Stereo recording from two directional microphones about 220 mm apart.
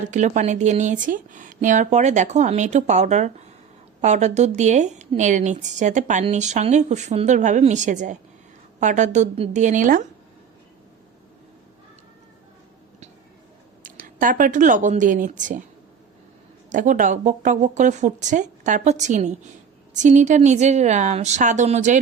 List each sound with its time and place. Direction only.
0.0 s a woman's voice: 35° right (ahead or behind)
13.8 s speech: 40° right (ahead or behind)
16.6 s a woman's voice: 35° right (ahead or behind)